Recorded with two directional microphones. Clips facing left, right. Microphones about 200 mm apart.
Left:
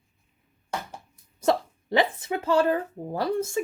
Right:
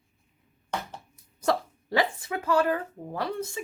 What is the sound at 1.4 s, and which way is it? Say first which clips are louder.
Speech: left 3 dB; 20° left (ahead or behind).